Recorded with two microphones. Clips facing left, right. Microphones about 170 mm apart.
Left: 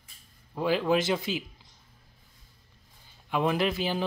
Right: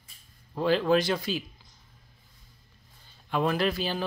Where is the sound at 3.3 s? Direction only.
15° left (ahead or behind).